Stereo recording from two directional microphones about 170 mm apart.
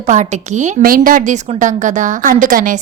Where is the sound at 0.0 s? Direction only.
45° right (ahead or behind).